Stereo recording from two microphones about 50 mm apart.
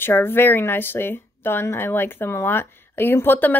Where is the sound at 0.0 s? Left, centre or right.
Left.